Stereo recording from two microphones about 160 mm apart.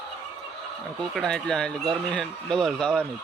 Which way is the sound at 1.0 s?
5° left (ahead or behind).